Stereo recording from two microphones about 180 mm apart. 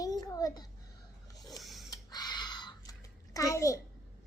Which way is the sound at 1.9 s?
20° left (ahead or behind).